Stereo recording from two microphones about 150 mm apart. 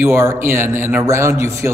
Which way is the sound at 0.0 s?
15° right (ahead or behind).